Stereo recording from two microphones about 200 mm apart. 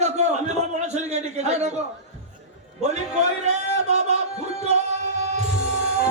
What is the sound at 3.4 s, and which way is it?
Music, 35° right (ahead or behind).